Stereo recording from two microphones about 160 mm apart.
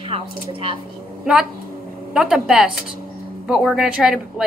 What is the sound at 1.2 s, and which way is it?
A woman's voice, 5° right (ahead or behind).